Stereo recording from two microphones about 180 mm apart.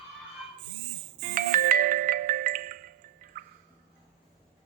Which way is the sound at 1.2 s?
50° right (ahead or behind).